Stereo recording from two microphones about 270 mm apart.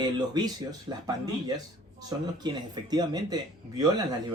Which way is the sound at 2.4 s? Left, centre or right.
Centre.